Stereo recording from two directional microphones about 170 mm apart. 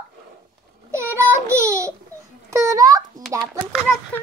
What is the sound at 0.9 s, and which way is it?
A child's voice, 15° right (ahead or behind).